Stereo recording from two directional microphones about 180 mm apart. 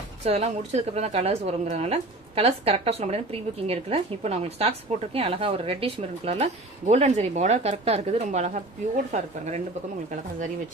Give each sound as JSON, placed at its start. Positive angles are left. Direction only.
{"t": 0.2, "sound": "a woman's voice", "side_deg": -35}